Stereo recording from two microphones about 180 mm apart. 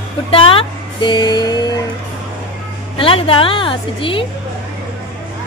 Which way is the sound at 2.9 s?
30° left (ahead or behind).